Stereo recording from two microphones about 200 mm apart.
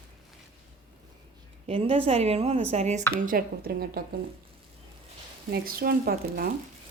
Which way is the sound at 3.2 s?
45° right (ahead or behind).